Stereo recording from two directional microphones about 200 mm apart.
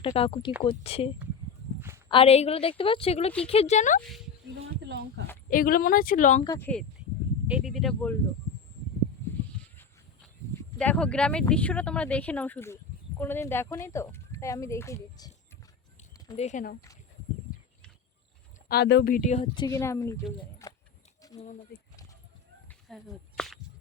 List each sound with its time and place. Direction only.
0.0 s a woman's voice: 30° left (ahead or behind)
4.9 s speech: 55° right (ahead or behind)
5.5 s speech: 45° left (ahead or behind)
6.4 s speech: 20° left (ahead or behind)
7.4 s speech: 5° right (ahead or behind)
10.5 s speech: 10° left (ahead or behind)
16.1 s a sound: 20° left (ahead or behind)
16.4 s speech: 40° left (ahead or behind)
18.7 s speech: 55° left (ahead or behind)
19.4 s speech: 20° left (ahead or behind)
21.4 s speech: 40° left (ahead or behind)
22.9 s speech: centre (ahead or behind)